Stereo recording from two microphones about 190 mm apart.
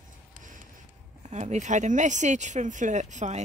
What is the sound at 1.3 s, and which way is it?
Speech, 35° right (ahead or behind).